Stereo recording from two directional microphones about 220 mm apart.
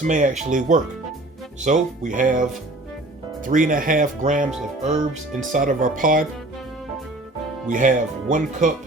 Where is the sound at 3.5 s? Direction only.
40° right (ahead or behind).